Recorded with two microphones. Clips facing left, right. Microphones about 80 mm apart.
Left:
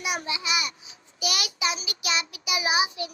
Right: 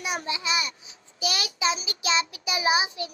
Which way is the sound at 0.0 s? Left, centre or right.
Right.